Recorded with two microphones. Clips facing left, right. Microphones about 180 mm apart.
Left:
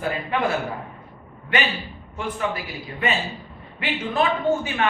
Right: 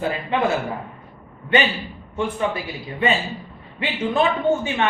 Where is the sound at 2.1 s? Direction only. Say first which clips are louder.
Right 4 dB; 25° right (ahead or behind).